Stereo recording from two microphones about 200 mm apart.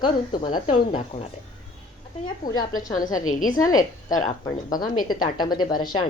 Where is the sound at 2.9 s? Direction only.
40° left (ahead or behind).